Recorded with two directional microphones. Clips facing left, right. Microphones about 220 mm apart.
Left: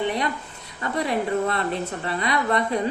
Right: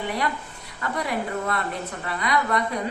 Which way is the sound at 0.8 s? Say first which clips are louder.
Left 3 dB; 25° left (ahead or behind).